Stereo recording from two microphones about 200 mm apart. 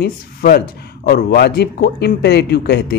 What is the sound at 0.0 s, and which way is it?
Speech, 50° left (ahead or behind).